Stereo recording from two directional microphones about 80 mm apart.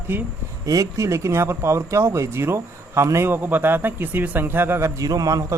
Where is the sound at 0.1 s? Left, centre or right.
Right.